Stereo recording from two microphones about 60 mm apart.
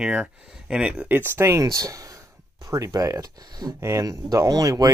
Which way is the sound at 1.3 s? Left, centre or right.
Right.